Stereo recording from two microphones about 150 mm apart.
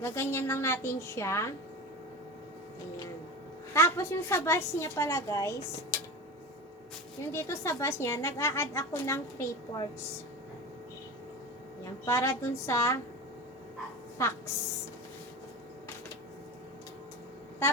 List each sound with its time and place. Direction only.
0.0 s a woman's voice: 15° left (ahead or behind)
3.8 s a woman's voice: 15° left (ahead or behind)
7.2 s a woman's voice: 15° left (ahead or behind)
12.0 s a woman's voice: 20° left (ahead or behind)
14.2 s a woman's voice: 20° left (ahead or behind)